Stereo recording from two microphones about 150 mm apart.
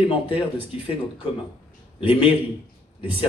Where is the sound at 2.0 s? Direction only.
40° left (ahead or behind).